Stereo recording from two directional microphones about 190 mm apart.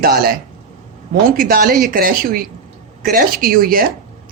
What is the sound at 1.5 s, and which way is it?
Speech, 50° right (ahead or behind).